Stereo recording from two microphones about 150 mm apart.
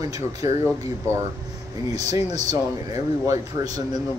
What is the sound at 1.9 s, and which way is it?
Speech, 45° left (ahead or behind).